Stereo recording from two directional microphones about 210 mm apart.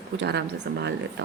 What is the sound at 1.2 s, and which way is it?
Speech, 60° right (ahead or behind).